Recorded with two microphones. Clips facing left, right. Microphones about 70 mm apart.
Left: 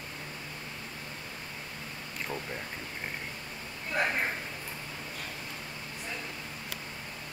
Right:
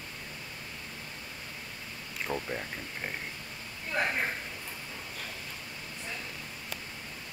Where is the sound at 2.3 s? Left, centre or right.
Centre.